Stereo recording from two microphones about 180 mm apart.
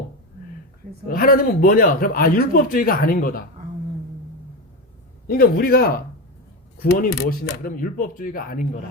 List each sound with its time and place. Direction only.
1.0 s a man's voice: 50° left (ahead or behind)
5.3 s a man's voice: 55° left (ahead or behind)